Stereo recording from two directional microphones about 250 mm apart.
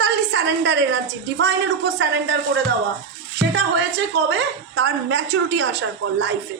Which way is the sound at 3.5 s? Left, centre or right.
Right.